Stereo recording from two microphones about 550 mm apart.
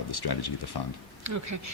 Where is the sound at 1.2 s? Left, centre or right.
Right.